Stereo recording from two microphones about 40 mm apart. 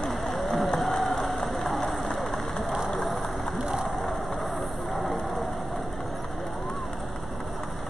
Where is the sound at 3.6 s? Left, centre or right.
Centre.